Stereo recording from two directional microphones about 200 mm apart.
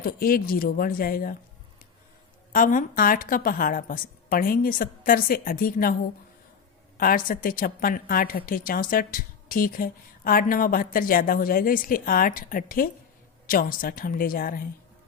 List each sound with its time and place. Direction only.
0.0 s a woman's voice: 45° left (ahead or behind)
2.5 s a woman's voice: 40° left (ahead or behind)
6.9 s a woman's voice: 45° left (ahead or behind)